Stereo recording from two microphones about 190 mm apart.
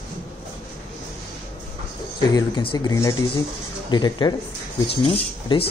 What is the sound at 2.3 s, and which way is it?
Speech, 25° left (ahead or behind).